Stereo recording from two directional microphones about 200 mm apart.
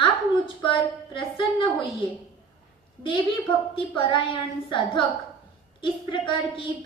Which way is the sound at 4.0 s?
25° left (ahead or behind).